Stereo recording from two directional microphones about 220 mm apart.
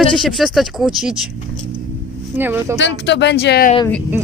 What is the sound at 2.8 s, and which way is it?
Speech, 50° left (ahead or behind).